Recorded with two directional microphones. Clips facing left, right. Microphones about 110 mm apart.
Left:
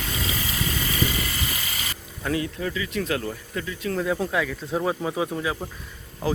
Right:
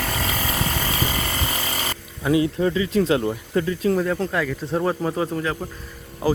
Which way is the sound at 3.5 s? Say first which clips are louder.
Right 9 dB; 40° right (ahead or behind).